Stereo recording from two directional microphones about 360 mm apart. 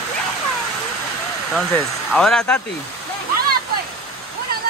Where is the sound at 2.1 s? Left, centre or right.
Centre.